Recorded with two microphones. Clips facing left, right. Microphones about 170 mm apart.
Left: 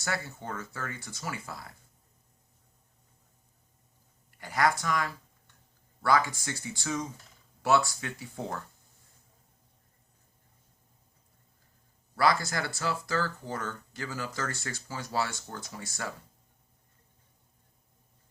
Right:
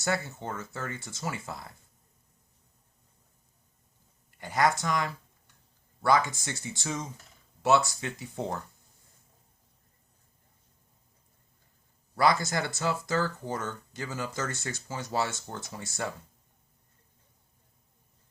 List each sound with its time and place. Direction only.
0.0 s speech: 25° right (ahead or behind)
4.4 s speech: 20° right (ahead or behind)
12.1 s speech: 20° right (ahead or behind)